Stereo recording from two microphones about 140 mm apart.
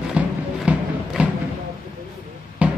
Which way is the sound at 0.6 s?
10° right (ahead or behind).